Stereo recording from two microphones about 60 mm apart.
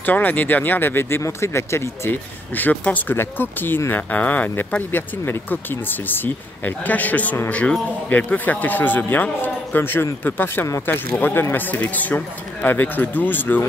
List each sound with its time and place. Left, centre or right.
0.0 s a man's voice: left
1.2 s speech: left
2.5 s a man's voice: left